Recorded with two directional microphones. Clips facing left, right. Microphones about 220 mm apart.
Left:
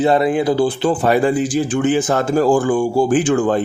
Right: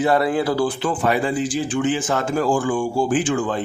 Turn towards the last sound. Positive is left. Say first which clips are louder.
# left 5 dB
turn(degrees=45)  # may be behind; listen again after turning